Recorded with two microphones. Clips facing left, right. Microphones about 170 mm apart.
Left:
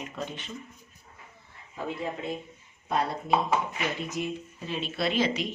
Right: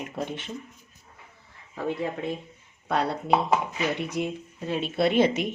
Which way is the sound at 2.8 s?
70° right (ahead or behind).